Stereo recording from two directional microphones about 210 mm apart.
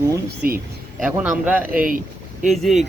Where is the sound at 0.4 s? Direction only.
45° right (ahead or behind).